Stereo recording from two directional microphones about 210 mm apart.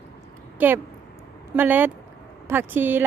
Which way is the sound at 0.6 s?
10° right (ahead or behind).